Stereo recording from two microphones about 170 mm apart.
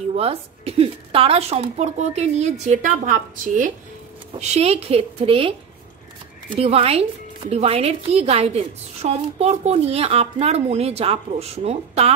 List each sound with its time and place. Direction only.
0.1 s a woman's voice: 35° right (ahead or behind)
4.4 s speech: 40° right (ahead or behind)
6.5 s speech: 35° right (ahead or behind)